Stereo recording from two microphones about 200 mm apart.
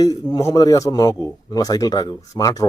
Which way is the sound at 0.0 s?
20° left (ahead or behind).